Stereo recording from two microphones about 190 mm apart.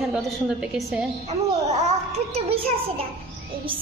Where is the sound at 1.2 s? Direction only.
35° right (ahead or behind).